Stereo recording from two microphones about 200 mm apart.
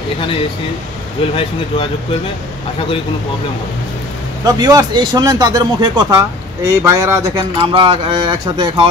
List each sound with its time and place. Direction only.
1.3 s speech: 25° left (ahead or behind)
4.5 s speech: 20° right (ahead or behind)